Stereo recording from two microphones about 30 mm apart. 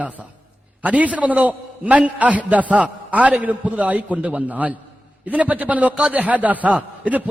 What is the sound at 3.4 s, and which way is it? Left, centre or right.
A man's voice, right.